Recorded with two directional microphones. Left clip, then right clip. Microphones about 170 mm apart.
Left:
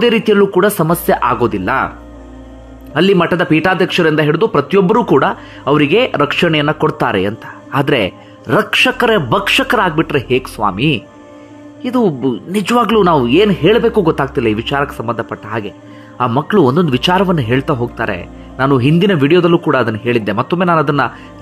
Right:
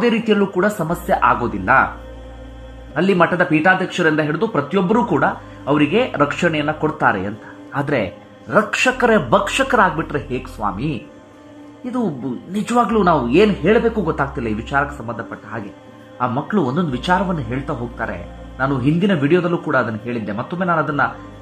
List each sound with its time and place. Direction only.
0.0 s speech: 35° left (ahead or behind)
2.9 s speech: 35° left (ahead or behind)